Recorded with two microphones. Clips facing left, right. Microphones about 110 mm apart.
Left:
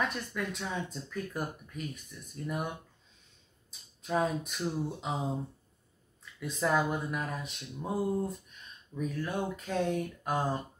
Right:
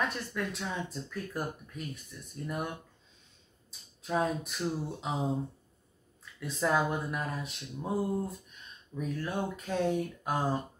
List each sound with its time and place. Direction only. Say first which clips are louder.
0.0 s speech: even; centre (ahead or behind)
4.0 s speech: even; centre (ahead or behind)
6.4 s speech: even; centre (ahead or behind)